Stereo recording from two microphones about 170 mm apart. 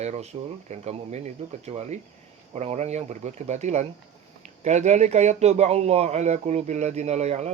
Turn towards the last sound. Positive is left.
turn(degrees=-40)  # may be behind; listen again after turning